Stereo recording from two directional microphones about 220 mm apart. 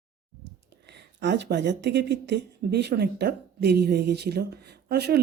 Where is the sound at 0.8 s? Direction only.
50° right (ahead or behind).